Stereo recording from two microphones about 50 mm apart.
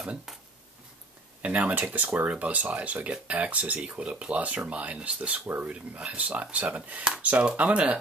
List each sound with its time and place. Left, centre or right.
1.4 s speech: right